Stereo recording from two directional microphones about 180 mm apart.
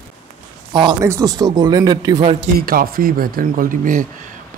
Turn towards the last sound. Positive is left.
turn(degrees=-50)  # may be behind; listen again after turning